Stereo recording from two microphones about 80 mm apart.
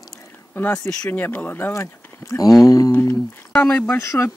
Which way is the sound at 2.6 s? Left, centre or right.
Left.